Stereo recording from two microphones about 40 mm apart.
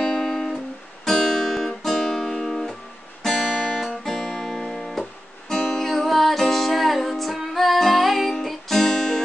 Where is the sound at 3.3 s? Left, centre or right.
Left.